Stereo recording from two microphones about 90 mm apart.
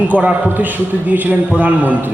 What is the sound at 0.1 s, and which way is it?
A man's voice, 15° right (ahead or behind).